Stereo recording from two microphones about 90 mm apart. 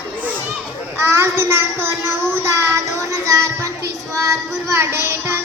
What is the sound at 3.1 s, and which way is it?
Speech, 40° right (ahead or behind).